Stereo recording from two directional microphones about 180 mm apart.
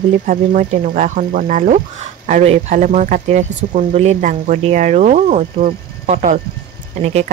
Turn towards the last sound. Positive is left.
turn(degrees=-35)  # may be behind; listen again after turning